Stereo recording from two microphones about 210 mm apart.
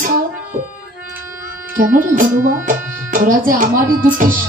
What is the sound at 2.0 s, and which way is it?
Speech, 40° right (ahead or behind).